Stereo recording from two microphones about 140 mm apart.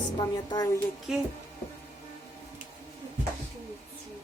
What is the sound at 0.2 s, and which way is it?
Speech, 25° left (ahead or behind).